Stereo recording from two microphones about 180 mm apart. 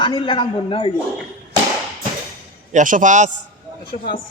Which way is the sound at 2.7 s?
45° right (ahead or behind).